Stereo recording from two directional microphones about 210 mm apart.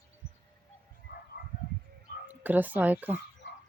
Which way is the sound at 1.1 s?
50° left (ahead or behind).